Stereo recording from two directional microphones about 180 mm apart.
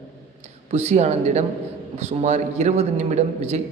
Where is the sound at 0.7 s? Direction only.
40° right (ahead or behind).